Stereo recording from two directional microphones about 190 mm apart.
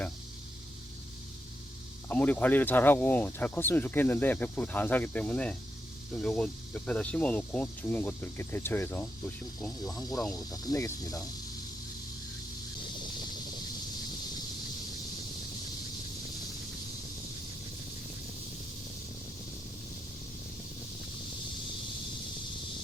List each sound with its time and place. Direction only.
2.0 s speech: 10° left (ahead or behind)
9.6 s speech: 20° left (ahead or behind)